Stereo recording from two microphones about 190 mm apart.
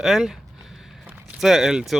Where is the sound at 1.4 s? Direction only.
Centre (ahead or behind).